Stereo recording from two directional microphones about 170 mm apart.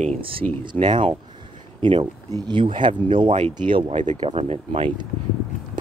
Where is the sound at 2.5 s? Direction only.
30° right (ahead or behind).